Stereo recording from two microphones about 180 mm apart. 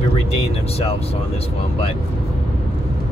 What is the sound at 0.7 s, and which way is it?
Speech, 35° left (ahead or behind).